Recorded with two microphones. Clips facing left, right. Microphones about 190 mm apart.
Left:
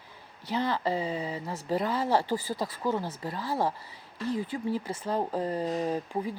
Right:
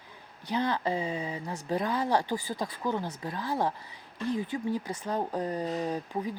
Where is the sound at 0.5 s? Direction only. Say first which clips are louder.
Even; 20° right (ahead or behind).